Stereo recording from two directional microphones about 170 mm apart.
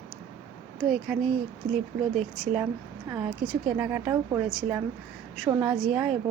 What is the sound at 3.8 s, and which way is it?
A woman's voice, 10° right (ahead or behind).